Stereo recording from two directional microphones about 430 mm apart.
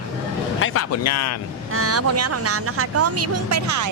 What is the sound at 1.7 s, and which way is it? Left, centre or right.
Speech, right.